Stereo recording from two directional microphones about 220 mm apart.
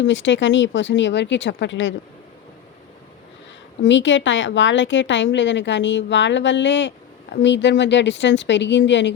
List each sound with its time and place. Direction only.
0.0 s a woman's voice: 55° left (ahead or behind)
3.8 s a woman's voice: 60° left (ahead or behind)